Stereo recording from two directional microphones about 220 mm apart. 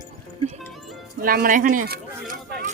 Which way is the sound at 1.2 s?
40° right (ahead or behind).